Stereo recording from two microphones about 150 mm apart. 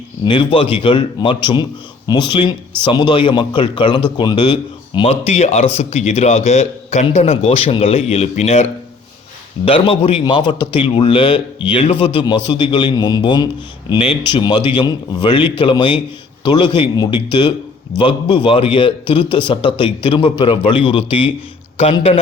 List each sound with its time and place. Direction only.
0.3 s a man's voice: 35° left (ahead or behind)
18.4 s a man's voice: 35° left (ahead or behind)